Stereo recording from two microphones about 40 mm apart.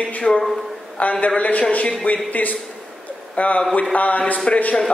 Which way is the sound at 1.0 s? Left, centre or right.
Left.